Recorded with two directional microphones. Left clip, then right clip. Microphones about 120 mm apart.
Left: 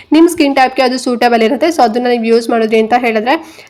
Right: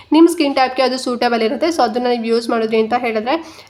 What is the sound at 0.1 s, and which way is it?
A woman's voice, 25° left (ahead or behind).